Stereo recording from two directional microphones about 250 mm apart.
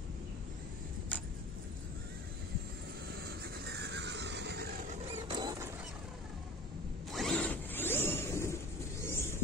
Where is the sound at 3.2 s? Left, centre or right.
Right.